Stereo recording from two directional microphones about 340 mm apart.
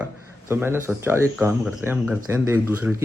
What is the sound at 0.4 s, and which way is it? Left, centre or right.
Speech, centre.